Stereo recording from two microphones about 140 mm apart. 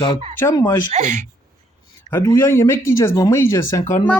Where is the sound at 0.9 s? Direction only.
60° right (ahead or behind).